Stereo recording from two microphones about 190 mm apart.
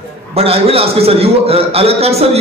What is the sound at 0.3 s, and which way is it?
A man's voice, 30° right (ahead or behind).